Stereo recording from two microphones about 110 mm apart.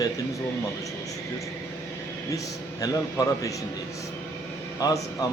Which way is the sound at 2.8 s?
30° left (ahead or behind).